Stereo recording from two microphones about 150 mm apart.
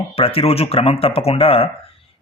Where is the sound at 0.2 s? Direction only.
40° left (ahead or behind).